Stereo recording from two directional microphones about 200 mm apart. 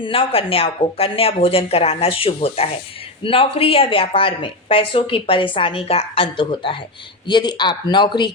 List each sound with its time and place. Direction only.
0.0 s speech: 25° left (ahead or behind)